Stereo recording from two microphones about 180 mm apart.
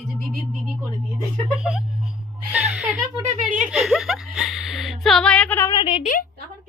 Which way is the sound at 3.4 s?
45° right (ahead or behind).